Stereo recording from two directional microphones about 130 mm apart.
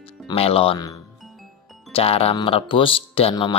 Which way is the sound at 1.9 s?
50° left (ahead or behind).